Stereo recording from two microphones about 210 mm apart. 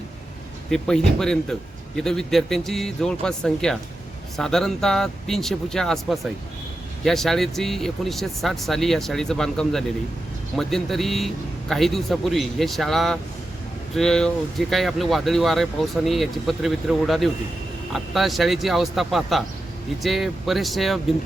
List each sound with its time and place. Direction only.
0.7 s speech: 5° left (ahead or behind)